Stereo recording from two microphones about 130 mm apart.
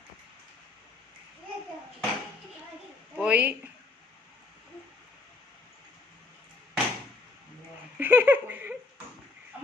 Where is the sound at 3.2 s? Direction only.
10° right (ahead or behind).